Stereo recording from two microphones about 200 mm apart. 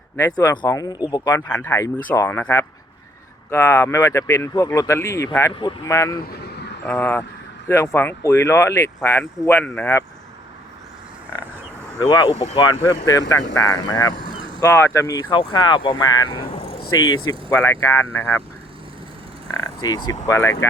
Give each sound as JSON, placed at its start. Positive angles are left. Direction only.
{"t": 0.2, "sound": "speech", "side_deg": 15}
{"t": 1.5, "sound": "speech", "side_deg": 10}
{"t": 6.1, "sound": "vehicle", "side_deg": 55}
{"t": 6.8, "sound": "speech", "side_deg": 10}
{"t": 11.9, "sound": "speech", "side_deg": 20}
{"t": 19.5, "sound": "a sound", "side_deg": 20}
{"t": 20.1, "sound": "speech", "side_deg": 15}